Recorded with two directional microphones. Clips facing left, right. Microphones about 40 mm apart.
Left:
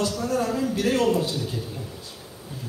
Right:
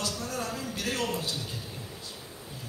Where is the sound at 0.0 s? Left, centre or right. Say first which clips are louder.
Left 9 dB; left.